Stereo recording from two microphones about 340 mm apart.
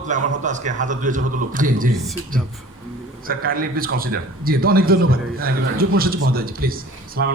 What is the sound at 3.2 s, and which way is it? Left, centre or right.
Speech, right.